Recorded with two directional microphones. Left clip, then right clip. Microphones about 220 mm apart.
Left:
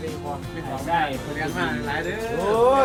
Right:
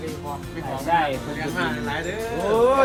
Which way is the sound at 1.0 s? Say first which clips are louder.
Even; 5° right (ahead or behind).